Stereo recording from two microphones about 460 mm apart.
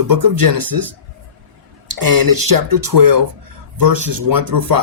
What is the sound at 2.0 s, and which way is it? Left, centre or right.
Speech, right.